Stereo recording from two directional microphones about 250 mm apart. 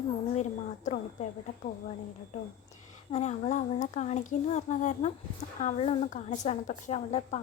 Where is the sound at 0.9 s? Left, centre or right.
Left.